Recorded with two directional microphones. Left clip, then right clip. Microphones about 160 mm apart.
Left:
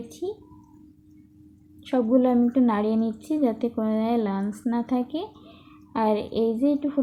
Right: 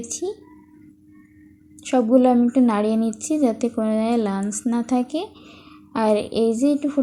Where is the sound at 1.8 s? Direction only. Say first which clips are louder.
Right 5 dB; 15° right (ahead or behind).